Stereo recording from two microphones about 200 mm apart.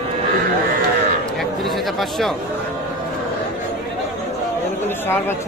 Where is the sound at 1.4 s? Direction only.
Centre (ahead or behind).